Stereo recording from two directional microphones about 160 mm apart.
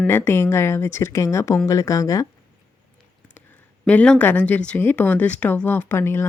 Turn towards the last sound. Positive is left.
turn(degrees=15)  # may be behind; listen again after turning